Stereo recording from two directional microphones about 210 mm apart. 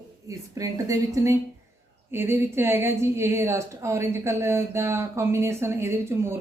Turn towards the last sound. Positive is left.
turn(degrees=-10)  # may be behind; listen again after turning